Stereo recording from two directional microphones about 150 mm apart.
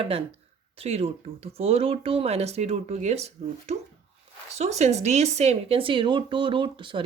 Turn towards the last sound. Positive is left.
turn(degrees=-35)  # may be behind; listen again after turning